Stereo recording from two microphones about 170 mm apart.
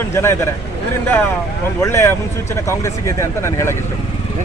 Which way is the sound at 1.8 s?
15° left (ahead or behind).